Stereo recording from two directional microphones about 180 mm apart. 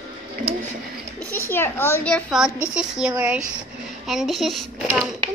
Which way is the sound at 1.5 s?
15° left (ahead or behind).